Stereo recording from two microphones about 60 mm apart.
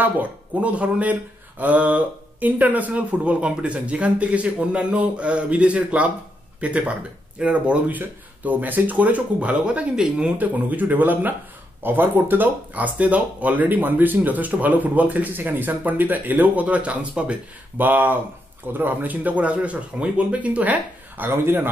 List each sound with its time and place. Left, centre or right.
0.0 s speech: right
10.4 s speech: right
17.7 s speech: right
21.2 s speech: right